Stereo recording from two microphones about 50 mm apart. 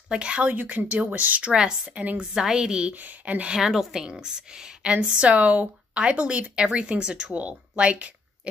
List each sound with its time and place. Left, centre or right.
0.1 s speech: right
0.5 s speech: right
1.5 s a woman's voice: centre
1.9 s speech: right
2.1 s a woman's voice: centre
2.9 s speech: right
3.4 s a woman's voice: centre; by 8.1 s right